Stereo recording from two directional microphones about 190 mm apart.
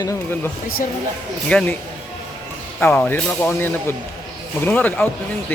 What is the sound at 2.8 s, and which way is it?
Speech, 10° left (ahead or behind).